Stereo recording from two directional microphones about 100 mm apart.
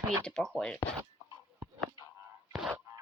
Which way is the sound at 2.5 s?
5° right (ahead or behind).